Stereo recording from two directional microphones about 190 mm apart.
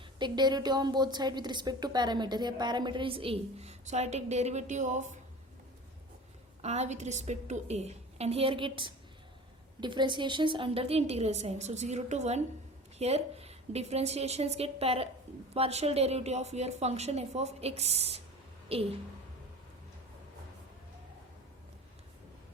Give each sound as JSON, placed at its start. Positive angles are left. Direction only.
{"t": 0.2, "sound": "a woman's voice", "side_deg": -20}
{"t": 6.6, "sound": "a woman's voice", "side_deg": -35}